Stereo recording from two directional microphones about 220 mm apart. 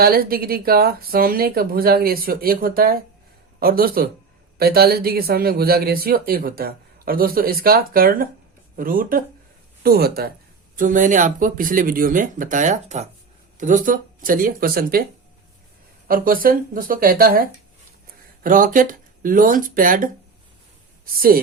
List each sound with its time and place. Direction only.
0.0 s speech: 45° right (ahead or behind)
16.0 s speech: 40° right (ahead or behind)
18.4 s speech: 40° right (ahead or behind)